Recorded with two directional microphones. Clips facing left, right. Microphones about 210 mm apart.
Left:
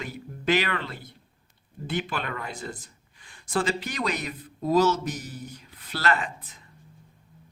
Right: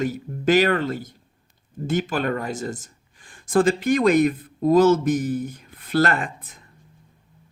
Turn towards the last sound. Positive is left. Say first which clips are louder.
# right 2 dB
turn(degrees=-55)  # may be behind; listen again after turning